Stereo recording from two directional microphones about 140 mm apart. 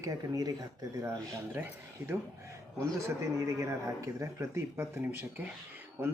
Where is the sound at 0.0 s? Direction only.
25° right (ahead or behind).